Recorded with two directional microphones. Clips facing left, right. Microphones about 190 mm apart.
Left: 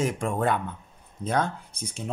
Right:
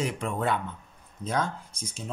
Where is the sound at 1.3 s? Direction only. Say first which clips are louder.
Left 3 dB; 60° left (ahead or behind).